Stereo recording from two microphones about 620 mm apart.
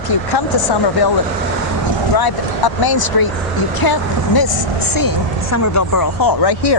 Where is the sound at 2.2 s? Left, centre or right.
Left.